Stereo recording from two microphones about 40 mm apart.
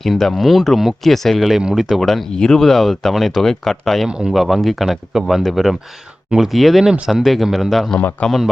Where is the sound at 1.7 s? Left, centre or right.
Centre.